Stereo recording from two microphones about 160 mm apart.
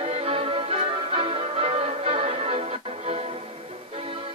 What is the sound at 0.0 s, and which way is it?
Music, 40° right (ahead or behind).